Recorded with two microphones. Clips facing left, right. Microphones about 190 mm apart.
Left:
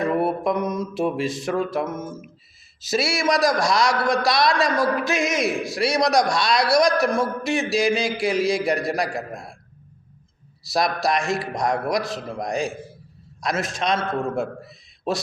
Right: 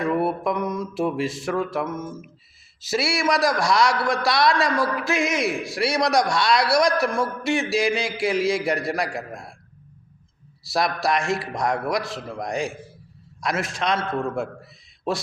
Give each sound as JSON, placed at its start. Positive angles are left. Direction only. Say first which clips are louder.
{"t": 0.0, "sound": "a man's voice", "louder": "left 1 dB", "side_deg": 20}
{"t": 10.6, "sound": "a man's voice", "louder": "left 1 dB", "side_deg": 20}